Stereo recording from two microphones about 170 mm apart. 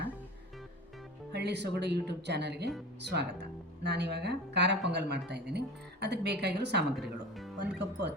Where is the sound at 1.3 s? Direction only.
90° right.